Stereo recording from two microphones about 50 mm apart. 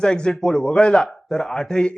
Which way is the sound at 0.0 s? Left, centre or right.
Centre.